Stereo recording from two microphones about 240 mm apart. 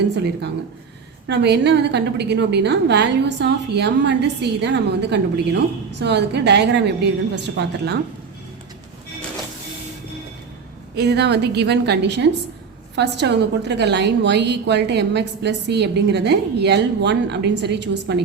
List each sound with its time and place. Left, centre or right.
1.3 s a woman's voice: right
10.9 s a woman's voice: right